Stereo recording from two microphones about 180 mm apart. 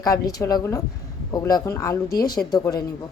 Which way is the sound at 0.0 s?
20° left (ahead or behind).